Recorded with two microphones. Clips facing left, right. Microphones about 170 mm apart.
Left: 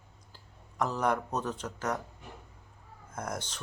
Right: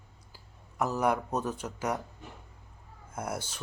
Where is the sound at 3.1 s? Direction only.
10° right (ahead or behind).